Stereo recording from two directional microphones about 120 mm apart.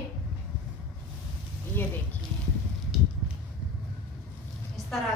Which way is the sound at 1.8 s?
15° left (ahead or behind).